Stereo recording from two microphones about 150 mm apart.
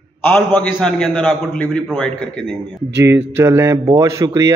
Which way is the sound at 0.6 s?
5° left (ahead or behind).